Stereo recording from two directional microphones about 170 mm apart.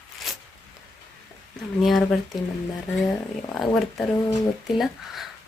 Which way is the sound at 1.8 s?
Centre (ahead or behind).